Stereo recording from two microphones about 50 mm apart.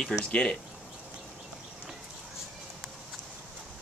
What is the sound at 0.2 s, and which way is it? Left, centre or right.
Speech, centre.